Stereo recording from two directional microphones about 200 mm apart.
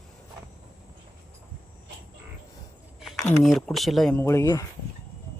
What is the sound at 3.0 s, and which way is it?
Speech, centre (ahead or behind).